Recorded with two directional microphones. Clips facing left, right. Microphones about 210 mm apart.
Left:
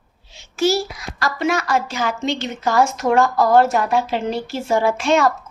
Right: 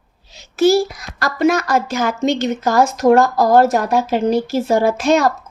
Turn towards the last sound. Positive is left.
turn(degrees=-40)  # may be behind; listen again after turning